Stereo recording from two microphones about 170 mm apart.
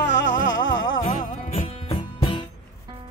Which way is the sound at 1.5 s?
35° left (ahead or behind).